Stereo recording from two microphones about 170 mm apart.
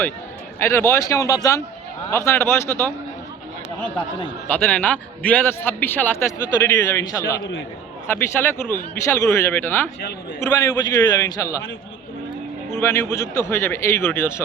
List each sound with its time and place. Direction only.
0.6 s a man's voice: 15° left (ahead or behind)
4.4 s a man's voice: 10° left (ahead or behind)
12.7 s a man's voice: 15° left (ahead or behind)